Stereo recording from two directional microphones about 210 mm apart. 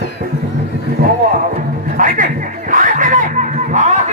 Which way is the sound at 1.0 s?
45° right (ahead or behind).